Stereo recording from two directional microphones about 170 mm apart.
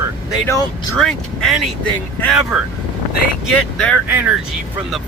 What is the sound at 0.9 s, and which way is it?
Speech, 5° left (ahead or behind).